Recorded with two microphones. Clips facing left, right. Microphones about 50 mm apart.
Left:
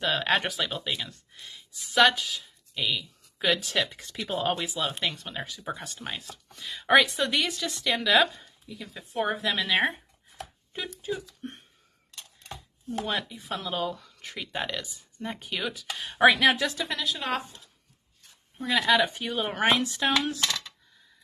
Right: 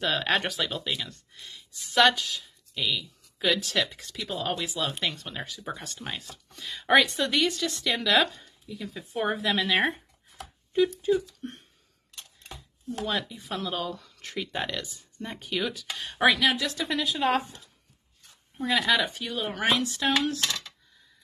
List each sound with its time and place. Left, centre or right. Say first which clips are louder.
0.0 s speech: even; centre
4.1 s a woman's voice: left 3 dB; left
4.6 s speech: even; centre
13.1 s speech: even; centre
16.3 s a woman's voice: left 3 dB; left
16.7 s speech: right 2 dB; centre
18.6 s speech: left 1 dB; centre
19.1 s speech: left 2 dB; left
19.9 s speech: even; centre